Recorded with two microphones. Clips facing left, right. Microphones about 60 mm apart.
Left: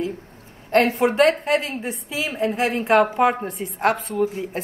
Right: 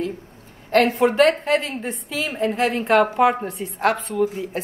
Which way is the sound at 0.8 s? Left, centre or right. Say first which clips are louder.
Right 2 dB; right.